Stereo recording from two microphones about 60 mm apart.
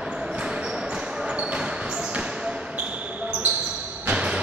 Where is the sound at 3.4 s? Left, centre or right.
Right.